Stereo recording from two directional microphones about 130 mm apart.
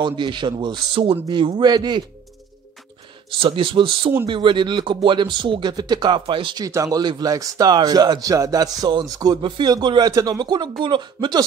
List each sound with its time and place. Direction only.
0.0 s speech: 40° right (ahead or behind)
3.3 s speech: 40° right (ahead or behind)
6.6 s speech: 25° right (ahead or behind)